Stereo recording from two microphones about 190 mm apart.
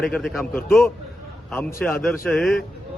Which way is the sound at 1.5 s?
10° left (ahead or behind).